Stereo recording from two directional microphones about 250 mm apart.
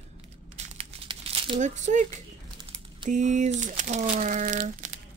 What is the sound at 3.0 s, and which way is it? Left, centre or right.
Speech, right.